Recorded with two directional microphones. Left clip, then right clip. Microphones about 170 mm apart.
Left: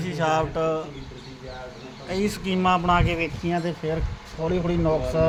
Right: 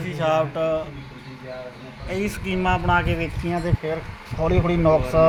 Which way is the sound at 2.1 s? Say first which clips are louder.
Even; 10° left (ahead or behind).